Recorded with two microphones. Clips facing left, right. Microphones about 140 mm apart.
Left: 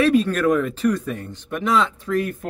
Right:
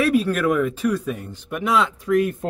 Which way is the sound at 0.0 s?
5° right (ahead or behind).